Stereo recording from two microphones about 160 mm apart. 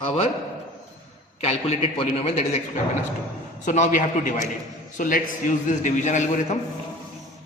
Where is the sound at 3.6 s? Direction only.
50° left (ahead or behind).